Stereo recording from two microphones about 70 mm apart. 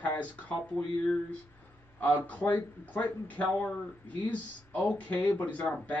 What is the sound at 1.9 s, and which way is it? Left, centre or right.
Speech, left.